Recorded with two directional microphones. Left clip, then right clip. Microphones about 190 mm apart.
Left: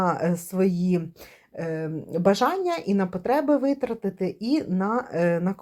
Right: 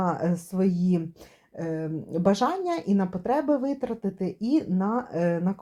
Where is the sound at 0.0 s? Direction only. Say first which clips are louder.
Left 3 dB; 30° left (ahead or behind).